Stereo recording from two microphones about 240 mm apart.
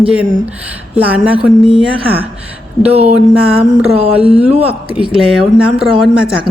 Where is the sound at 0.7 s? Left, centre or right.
Centre.